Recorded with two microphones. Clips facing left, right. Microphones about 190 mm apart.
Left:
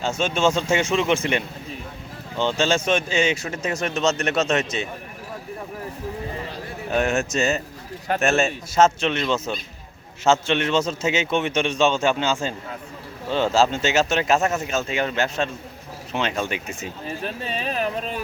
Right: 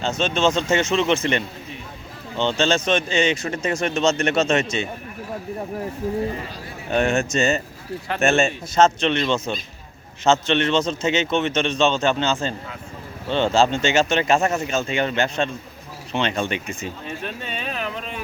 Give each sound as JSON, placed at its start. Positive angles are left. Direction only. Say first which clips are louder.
{"t": 0.0, "sound": "a man's voice", "louder": "right 1 dB", "side_deg": 10}
{"t": 6.9, "sound": "a man's voice", "louder": "right 2 dB", "side_deg": 5}
{"t": 17.1, "sound": "speech", "louder": "left 5 dB", "side_deg": 35}